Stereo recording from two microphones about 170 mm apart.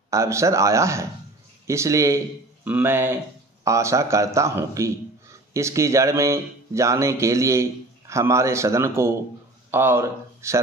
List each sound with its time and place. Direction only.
0.1 s speech: 15° right (ahead or behind)